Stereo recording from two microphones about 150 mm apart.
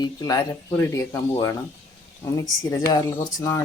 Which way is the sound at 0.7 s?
10° left (ahead or behind).